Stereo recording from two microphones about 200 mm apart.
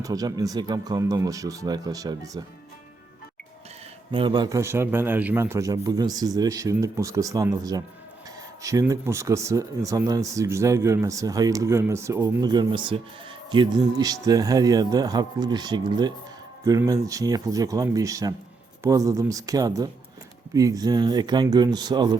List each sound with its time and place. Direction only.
0.0 s speech: 20° right (ahead or behind)
4.1 s speech: 25° right (ahead or behind)